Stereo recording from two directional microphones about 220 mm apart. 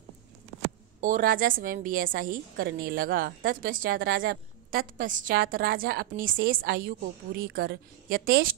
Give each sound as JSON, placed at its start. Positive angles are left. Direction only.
{"t": 1.0, "sound": "a woman's voice", "side_deg": -35}